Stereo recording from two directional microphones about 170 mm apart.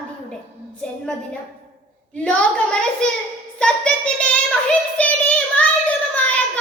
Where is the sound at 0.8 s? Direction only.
5° left (ahead or behind).